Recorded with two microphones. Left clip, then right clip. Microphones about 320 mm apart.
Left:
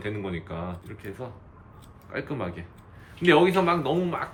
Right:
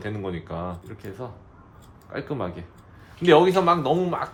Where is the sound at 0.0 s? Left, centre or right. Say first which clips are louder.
Right 1 dB; right.